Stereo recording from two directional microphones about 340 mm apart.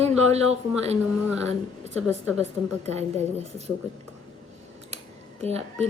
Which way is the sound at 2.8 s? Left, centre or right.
Centre.